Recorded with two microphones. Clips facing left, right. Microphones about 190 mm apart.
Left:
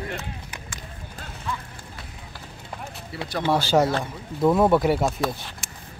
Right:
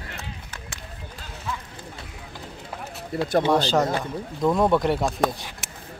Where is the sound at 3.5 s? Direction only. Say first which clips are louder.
Even; 10° left (ahead or behind).